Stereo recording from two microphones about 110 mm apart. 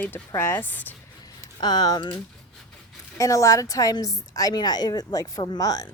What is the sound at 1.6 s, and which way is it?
Speech, 40° left (ahead or behind).